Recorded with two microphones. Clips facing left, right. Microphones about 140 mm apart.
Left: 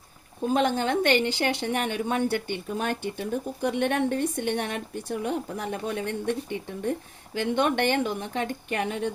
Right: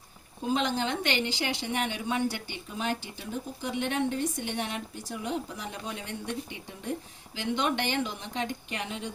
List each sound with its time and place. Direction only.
0.5 s a woman's voice: 50° left (ahead or behind)